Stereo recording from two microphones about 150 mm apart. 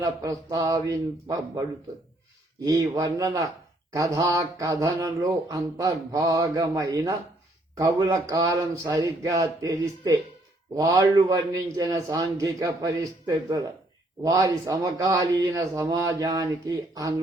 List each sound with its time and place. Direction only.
0.0 s speech: 20° right (ahead or behind)
2.6 s speech: 25° right (ahead or behind)